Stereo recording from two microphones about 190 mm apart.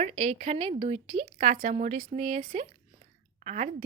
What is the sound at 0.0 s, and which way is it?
Speech, 35° right (ahead or behind).